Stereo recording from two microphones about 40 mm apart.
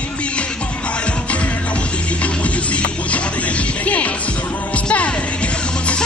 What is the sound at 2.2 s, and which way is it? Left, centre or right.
Music, left.